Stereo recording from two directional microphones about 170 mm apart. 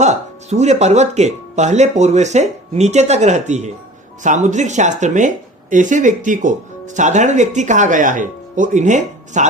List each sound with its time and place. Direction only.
0.0 s speech: 40° right (ahead or behind)